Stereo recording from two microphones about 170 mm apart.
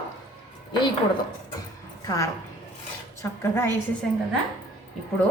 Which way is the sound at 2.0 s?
20° left (ahead or behind).